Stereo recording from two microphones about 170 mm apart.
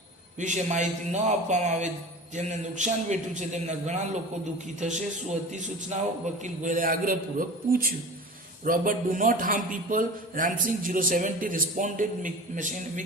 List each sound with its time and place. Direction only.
0.3 s a man's voice: 45° right (ahead or behind)